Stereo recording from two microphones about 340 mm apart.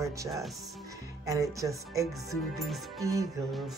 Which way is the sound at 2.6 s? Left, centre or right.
Centre.